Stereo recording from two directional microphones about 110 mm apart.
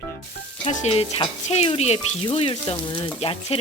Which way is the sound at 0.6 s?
70° left (ahead or behind).